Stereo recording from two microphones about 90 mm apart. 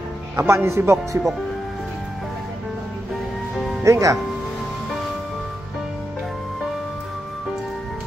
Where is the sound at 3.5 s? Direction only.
Centre (ahead or behind).